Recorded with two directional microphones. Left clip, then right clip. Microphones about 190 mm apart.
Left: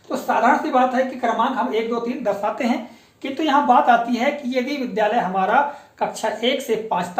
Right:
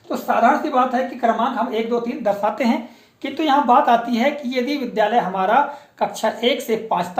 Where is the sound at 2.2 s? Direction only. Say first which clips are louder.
Right 2 dB; 45° right (ahead or behind).